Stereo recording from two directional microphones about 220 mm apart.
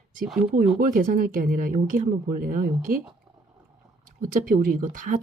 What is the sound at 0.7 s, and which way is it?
Speech, 40° right (ahead or behind).